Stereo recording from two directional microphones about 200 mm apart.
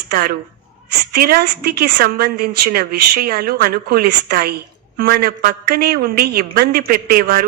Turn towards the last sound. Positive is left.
turn(degrees=-45)  # may be behind; listen again after turning